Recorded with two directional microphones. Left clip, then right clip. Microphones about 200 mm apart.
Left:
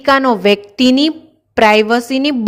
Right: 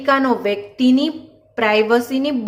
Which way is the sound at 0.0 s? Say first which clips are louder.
Left 5 dB; 45° left (ahead or behind).